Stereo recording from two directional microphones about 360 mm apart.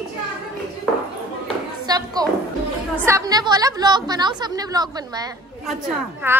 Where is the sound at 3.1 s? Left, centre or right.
Centre.